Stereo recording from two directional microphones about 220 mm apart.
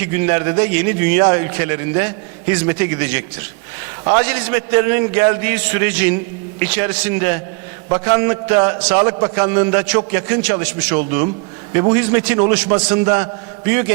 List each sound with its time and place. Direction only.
0.0 s a man's voice: 15° right (ahead or behind)